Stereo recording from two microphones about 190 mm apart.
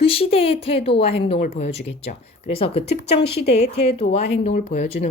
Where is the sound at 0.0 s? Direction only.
30° left (ahead or behind).